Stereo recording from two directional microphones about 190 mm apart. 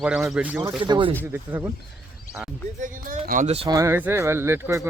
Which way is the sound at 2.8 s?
45° right (ahead or behind).